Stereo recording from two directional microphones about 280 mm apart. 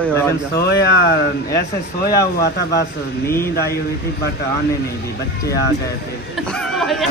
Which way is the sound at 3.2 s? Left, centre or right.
Centre.